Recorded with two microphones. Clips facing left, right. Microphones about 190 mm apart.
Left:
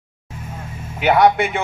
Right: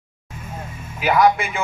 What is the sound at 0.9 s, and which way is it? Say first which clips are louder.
Speech: left 2 dB; 70° left (ahead or behind).